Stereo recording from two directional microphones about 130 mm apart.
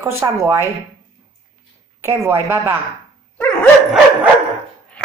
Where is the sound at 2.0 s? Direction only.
20° right (ahead or behind).